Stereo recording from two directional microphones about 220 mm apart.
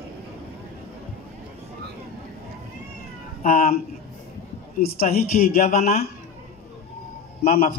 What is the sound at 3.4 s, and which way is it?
Speech, 40° left (ahead or behind).